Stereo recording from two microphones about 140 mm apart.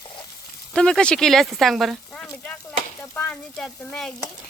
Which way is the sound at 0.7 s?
5° left (ahead or behind).